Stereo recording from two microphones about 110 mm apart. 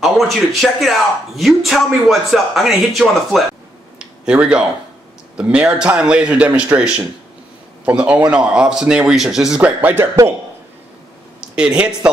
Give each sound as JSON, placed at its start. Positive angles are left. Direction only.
{"t": 0.0, "sound": "speech", "side_deg": 0}
{"t": 4.0, "sound": "a sound", "side_deg": -10}
{"t": 5.4, "sound": "speech", "side_deg": -10}
{"t": 9.6, "sound": "speech", "side_deg": -15}
{"t": 11.4, "sound": "speech", "side_deg": -10}